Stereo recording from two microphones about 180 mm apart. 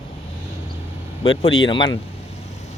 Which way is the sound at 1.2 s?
25° left (ahead or behind).